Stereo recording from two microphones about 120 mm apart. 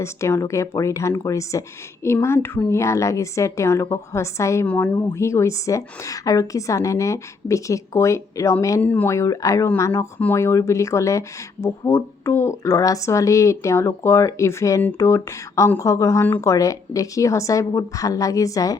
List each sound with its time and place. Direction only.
0.0 s speech: 25° left (ahead or behind)
8.8 s speech: 15° left (ahead or behind)
9.1 s speech: 25° left (ahead or behind)